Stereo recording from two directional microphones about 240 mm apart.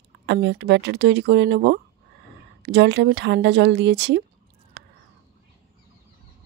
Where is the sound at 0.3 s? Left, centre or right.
Right.